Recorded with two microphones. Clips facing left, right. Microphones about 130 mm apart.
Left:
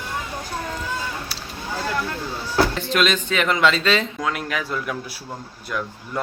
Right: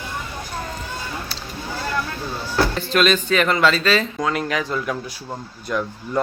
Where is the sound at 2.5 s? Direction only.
15° left (ahead or behind).